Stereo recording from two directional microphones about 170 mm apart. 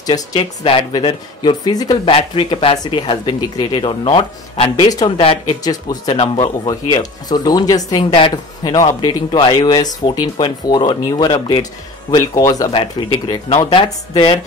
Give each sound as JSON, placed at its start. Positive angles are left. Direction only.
{"t": 0.0, "sound": "speech", "side_deg": 25}
{"t": 6.0, "sound": "speech", "side_deg": 40}
{"t": 6.6, "sound": "speech", "side_deg": 20}